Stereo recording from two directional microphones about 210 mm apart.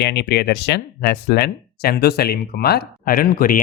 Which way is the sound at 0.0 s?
55° left (ahead or behind).